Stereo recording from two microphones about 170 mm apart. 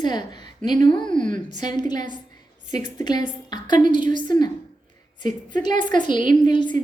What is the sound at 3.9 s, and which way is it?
Speech, 50° right (ahead or behind).